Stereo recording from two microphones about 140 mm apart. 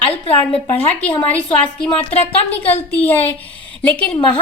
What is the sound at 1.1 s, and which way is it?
Speech, 10° left (ahead or behind).